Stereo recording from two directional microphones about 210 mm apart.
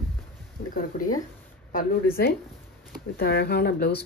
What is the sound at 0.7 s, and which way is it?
Speech, 40° left (ahead or behind).